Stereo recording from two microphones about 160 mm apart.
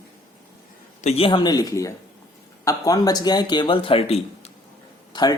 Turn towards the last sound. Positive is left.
turn(degrees=25)  # may be behind; listen again after turning